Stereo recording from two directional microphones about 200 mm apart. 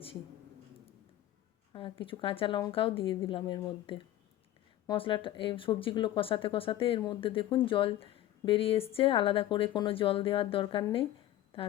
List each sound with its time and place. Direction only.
1.7 s speech: 25° left (ahead or behind)